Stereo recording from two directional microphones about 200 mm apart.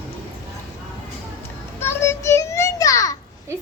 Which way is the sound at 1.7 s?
10° left (ahead or behind).